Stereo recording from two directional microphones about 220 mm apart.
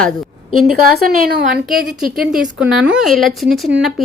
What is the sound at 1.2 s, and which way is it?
Speech, 40° right (ahead or behind).